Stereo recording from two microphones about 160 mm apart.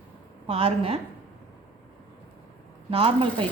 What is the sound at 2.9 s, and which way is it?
Speech, 35° right (ahead or behind).